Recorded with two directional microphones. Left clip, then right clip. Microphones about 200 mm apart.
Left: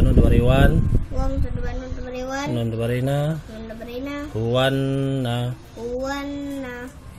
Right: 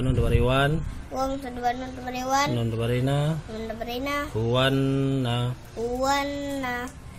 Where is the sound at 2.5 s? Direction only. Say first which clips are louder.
Left 3 dB; 10° left (ahead or behind).